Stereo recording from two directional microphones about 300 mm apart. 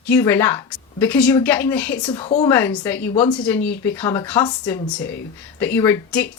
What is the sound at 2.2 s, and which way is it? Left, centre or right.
Speech, left.